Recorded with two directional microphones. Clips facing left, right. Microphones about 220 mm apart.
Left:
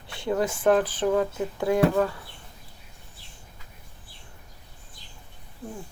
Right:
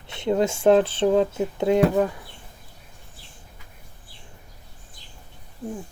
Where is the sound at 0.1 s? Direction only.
20° right (ahead or behind).